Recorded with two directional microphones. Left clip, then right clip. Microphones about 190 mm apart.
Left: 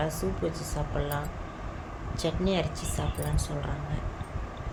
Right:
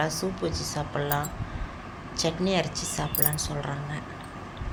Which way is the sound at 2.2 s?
5° right (ahead or behind).